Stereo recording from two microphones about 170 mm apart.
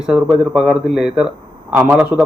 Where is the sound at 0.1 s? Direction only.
5° right (ahead or behind).